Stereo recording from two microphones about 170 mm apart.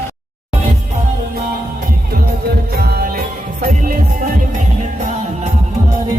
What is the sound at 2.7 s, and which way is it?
Music, 65° right (ahead or behind).